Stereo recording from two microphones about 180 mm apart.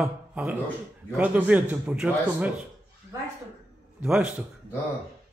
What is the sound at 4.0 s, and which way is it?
Speech, 5° right (ahead or behind).